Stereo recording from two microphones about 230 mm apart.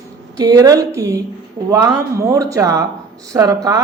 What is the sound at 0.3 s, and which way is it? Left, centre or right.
Speech, centre.